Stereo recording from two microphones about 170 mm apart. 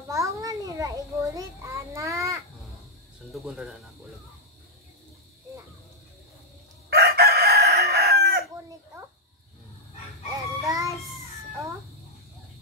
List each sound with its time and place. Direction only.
0.1 s child singing: 20° right (ahead or behind)
3.3 s speech: centre (ahead or behind)
6.9 s chicken: 65° right (ahead or behind)
10.6 s a sound: 20° right (ahead or behind)